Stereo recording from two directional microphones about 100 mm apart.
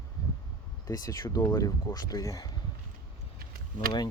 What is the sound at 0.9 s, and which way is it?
Speech, 40° left (ahead or behind).